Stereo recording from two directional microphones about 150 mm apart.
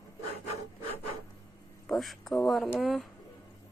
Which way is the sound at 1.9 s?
Centre (ahead or behind).